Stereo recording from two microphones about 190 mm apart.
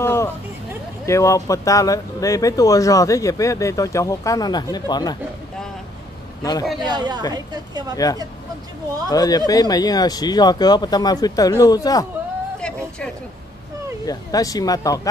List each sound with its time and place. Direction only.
0.0 s a sound: 15° left (ahead or behind)
1.0 s speech: 15° left (ahead or behind)
6.8 s speech: 20° right (ahead or behind)
8.0 s speech: 20° left (ahead or behind)
12.5 s a sound: 5° left (ahead or behind)
14.0 s speech: 20° left (ahead or behind)